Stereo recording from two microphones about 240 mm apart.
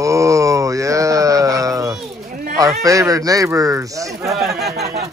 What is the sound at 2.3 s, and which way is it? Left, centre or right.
Speech, right.